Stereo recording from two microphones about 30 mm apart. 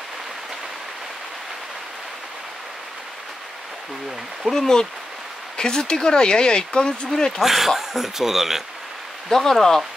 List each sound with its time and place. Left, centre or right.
4.5 s speech: centre
7.3 s speech: centre
9.3 s speech: centre